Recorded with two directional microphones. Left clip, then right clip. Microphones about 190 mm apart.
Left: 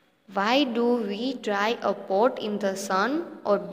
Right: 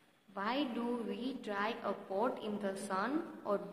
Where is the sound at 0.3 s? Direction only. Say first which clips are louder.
Left 14 dB; 35° left (ahead or behind).